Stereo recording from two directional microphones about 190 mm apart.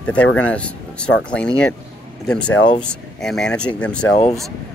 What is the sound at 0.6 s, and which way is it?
Speech, 5° left (ahead or behind).